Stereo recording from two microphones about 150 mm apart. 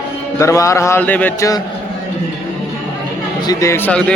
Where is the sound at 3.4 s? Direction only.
20° left (ahead or behind).